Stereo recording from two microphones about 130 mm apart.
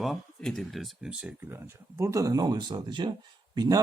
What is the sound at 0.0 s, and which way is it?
Speech, centre (ahead or behind).